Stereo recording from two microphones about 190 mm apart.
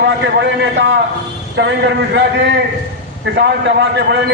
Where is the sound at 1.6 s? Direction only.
75° right (ahead or behind).